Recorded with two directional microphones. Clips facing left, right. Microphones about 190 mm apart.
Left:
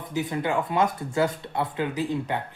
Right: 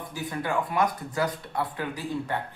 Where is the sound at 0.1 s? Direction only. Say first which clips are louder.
Left 4 dB; 20° left (ahead or behind).